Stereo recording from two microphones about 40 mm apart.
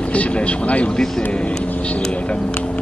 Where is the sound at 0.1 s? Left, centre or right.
Left.